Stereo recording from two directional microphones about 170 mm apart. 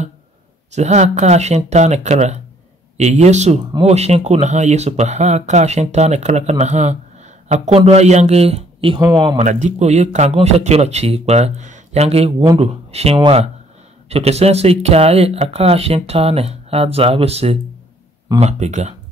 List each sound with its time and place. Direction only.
0.7 s speech: 40° right (ahead or behind); by 9.4 s 25° right (ahead or behind)
9.4 s speech: 45° right (ahead or behind)